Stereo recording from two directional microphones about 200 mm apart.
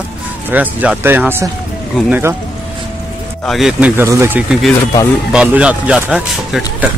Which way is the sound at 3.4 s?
Centre (ahead or behind).